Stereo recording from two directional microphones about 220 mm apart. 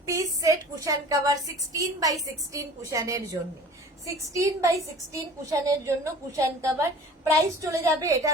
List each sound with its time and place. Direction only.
0.0 s a woman's voice: 15° right (ahead or behind)